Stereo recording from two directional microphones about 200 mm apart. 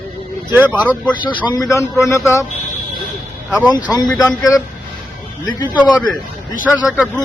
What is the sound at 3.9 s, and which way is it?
Speech, 20° left (ahead or behind).